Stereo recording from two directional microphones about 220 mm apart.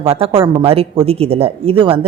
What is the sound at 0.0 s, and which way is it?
A woman's voice, 25° right (ahead or behind).